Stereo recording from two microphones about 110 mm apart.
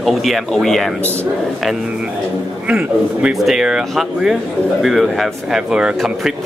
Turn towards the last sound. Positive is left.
turn(degrees=-5)  # may be behind; listen again after turning